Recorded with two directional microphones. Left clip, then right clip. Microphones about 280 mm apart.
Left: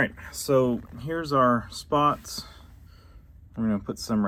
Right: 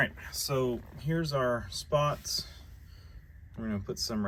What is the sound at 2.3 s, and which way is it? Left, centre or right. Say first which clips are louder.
Speech: right 3 dB; centre.